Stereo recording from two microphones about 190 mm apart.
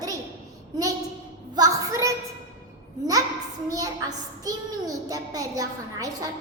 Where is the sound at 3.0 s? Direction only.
20° right (ahead or behind).